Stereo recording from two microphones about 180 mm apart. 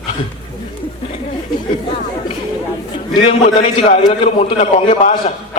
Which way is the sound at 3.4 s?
35° left (ahead or behind).